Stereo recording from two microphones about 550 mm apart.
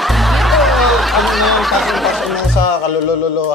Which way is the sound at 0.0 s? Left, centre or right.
Centre.